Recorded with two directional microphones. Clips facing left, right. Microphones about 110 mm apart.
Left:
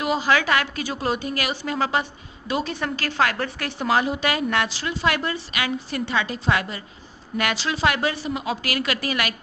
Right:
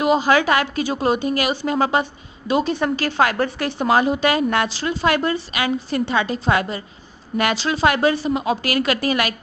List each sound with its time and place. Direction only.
0.0 s a woman's voice: 25° right (ahead or behind)